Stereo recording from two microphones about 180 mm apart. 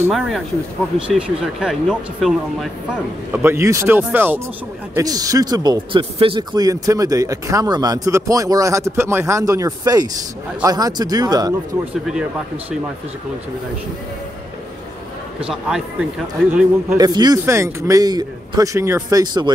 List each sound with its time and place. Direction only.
0.1 s speech: centre (ahead or behind)
3.4 s speech: 15° right (ahead or behind)
15.4 s speech: 5° right (ahead or behind)
17.0 s speech: 20° right (ahead or behind)